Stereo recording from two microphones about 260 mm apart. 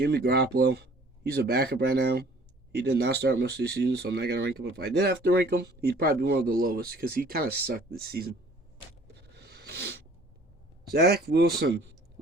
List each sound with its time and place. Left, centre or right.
0.0 s speech: right
9.3 s a sound: right
10.9 s speech: right